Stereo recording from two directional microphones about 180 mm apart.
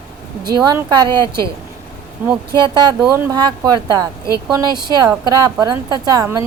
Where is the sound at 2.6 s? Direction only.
25° right (ahead or behind).